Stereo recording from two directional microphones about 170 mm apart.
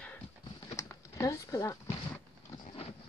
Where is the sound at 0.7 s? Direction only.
15° left (ahead or behind).